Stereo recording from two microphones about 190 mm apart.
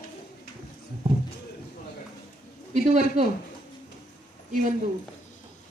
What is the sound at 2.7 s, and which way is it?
Speech, 40° right (ahead or behind).